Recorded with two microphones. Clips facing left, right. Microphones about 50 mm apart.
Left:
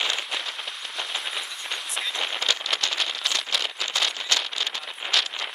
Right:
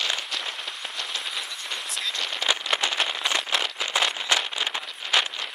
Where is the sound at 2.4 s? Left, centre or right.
Centre.